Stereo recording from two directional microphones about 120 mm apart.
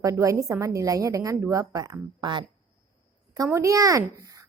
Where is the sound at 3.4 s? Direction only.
25° right (ahead or behind).